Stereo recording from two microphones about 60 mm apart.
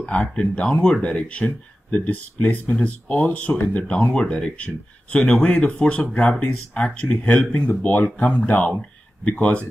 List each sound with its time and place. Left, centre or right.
0.0 s speech: centre